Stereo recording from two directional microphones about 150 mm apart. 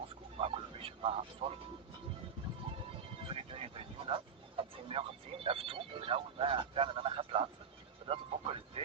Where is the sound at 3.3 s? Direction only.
40° right (ahead or behind).